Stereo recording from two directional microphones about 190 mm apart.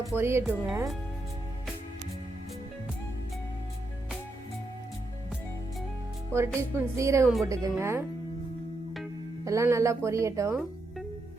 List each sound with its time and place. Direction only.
0.0 s speech: 15° right (ahead or behind)
6.6 s speech: 15° right (ahead or behind)
9.4 s speech: 15° right (ahead or behind)